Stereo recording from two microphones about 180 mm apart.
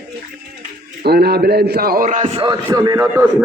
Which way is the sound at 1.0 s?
60° right (ahead or behind).